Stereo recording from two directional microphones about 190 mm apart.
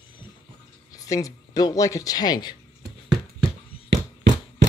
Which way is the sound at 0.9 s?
20° left (ahead or behind).